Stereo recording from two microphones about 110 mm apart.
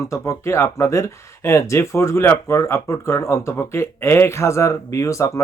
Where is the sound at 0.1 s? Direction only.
25° left (ahead or behind).